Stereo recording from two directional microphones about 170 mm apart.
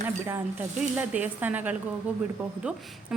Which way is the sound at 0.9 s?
10° right (ahead or behind).